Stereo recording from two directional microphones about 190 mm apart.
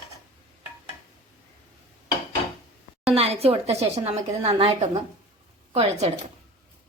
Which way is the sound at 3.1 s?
30° right (ahead or behind).